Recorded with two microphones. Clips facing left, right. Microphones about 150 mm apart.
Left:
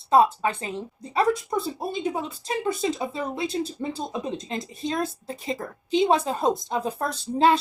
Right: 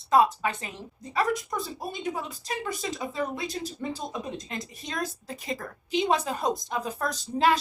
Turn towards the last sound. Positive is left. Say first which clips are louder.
# left 4 dB
turn(degrees=30)  # may be behind; listen again after turning